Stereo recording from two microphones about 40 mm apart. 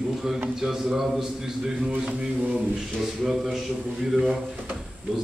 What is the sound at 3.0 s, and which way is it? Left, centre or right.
Mantra, centre.